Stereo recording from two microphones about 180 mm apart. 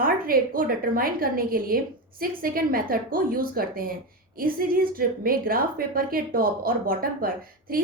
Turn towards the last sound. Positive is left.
turn(degrees=-55)  # may be behind; listen again after turning